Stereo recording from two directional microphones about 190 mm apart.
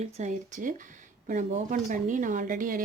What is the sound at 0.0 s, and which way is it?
Speech, 40° right (ahead or behind).